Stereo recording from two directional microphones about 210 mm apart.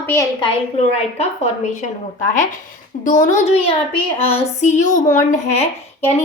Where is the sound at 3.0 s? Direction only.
40° left (ahead or behind).